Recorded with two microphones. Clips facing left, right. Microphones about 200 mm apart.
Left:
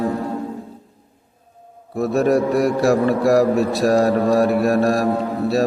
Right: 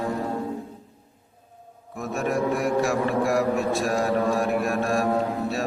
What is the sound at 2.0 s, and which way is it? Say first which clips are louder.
Music: left 9 dB; 35° left (ahead or behind).